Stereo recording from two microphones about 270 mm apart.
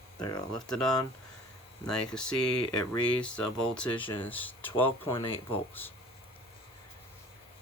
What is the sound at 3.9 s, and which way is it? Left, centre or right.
Speech, centre.